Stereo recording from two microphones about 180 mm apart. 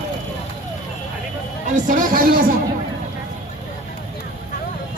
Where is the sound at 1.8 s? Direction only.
50° right (ahead or behind).